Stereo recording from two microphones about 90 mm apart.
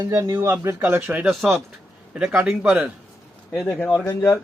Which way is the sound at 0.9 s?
20° right (ahead or behind).